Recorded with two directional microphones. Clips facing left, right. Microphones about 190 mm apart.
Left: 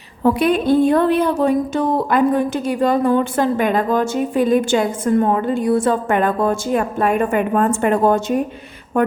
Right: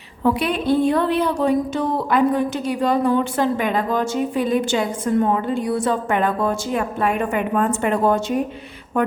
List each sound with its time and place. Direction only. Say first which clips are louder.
0.2 s speech: left 4 dB; 45° left (ahead or behind)